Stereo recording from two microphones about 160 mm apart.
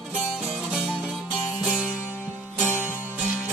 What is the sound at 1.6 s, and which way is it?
Music, 5° right (ahead or behind).